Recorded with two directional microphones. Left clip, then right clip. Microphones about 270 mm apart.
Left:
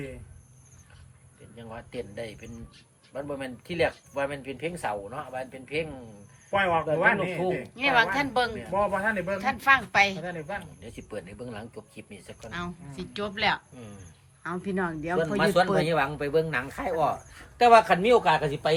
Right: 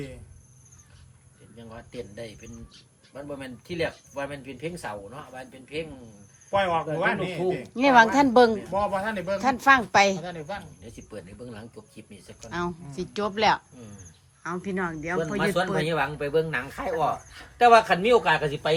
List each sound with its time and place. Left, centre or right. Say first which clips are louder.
1.5 s speech: left 2 dB; centre
6.5 s speech: even; centre
7.5 s speech: right 6 dB; centre
10.8 s speech: left 3 dB; centre
12.4 s speech: right 6 dB; centre
13.7 s speech: left 1 dB; centre